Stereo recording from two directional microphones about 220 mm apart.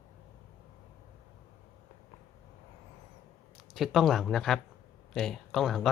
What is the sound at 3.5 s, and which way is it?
Speech, centre (ahead or behind).